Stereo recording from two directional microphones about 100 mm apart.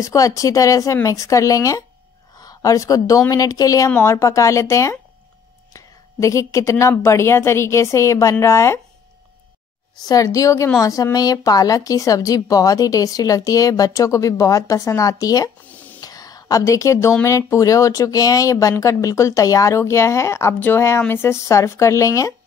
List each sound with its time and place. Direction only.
0.0 s a woman's voice: 35° left (ahead or behind)
10.0 s a woman's voice: 35° left (ahead or behind)
15.7 s a sound: 15° left (ahead or behind)
16.0 s whispering: 40° left (ahead or behind)
17.2 s a woman's voice: 30° left (ahead or behind)